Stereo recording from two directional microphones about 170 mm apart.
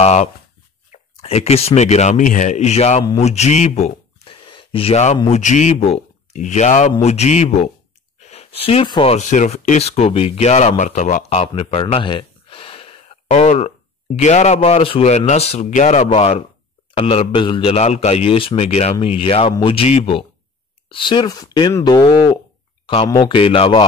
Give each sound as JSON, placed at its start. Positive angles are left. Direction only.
{"t": 0.0, "sound": "a man's voice", "side_deg": 40}